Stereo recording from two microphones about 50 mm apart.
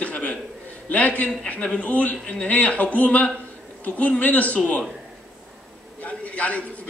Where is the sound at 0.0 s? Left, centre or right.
Left.